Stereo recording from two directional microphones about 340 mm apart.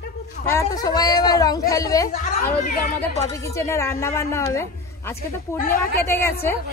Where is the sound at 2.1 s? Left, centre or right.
Left.